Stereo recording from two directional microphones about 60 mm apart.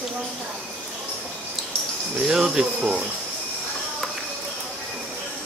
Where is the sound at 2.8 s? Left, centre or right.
Right.